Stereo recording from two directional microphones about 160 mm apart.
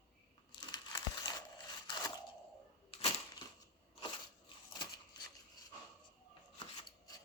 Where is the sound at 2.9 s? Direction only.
35° left (ahead or behind).